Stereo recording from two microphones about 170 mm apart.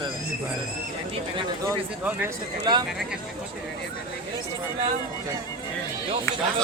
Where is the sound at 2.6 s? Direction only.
25° right (ahead or behind).